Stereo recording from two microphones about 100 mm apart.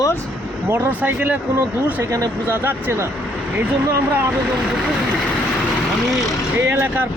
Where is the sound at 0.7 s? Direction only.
15° right (ahead or behind).